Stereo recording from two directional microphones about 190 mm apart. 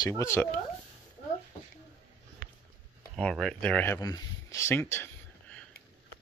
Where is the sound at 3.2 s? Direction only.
5° left (ahead or behind).